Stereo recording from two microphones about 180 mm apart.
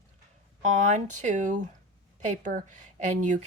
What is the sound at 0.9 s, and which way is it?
Speech, 45° right (ahead or behind).